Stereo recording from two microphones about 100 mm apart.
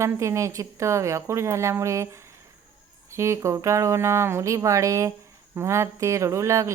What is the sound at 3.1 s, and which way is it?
Speech, 30° right (ahead or behind).